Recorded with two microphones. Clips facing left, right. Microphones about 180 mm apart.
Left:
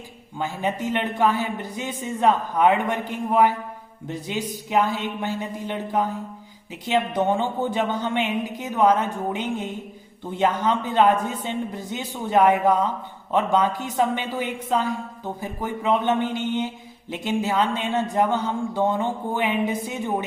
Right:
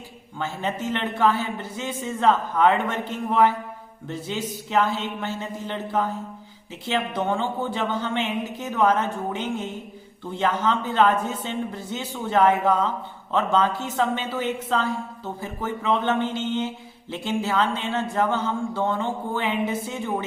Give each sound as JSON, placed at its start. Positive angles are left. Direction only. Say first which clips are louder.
{"t": 0.3, "sound": "a woman's voice", "louder": "left 2 dB", "side_deg": 15}